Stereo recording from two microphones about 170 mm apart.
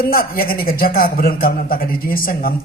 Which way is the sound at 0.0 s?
60° left (ahead or behind).